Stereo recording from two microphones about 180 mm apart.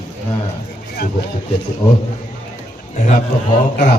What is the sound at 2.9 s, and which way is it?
Speech, 40° left (ahead or behind).